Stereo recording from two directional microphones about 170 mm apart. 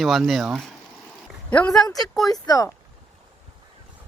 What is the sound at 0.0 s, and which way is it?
A man's voice, centre (ahead or behind).